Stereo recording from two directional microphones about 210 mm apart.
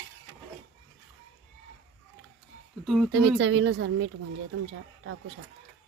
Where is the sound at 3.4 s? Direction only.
60° right (ahead or behind).